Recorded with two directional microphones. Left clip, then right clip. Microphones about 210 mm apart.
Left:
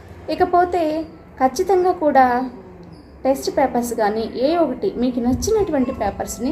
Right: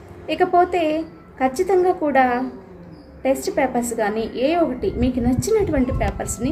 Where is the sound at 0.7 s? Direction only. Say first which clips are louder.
Even; 25° right (ahead or behind).